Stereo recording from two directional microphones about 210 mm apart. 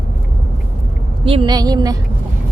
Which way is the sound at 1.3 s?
25° right (ahead or behind).